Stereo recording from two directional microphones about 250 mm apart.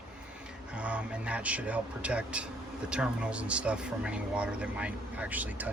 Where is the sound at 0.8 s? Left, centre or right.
Centre.